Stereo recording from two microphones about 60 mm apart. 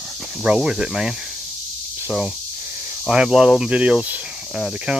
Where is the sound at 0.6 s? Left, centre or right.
Centre.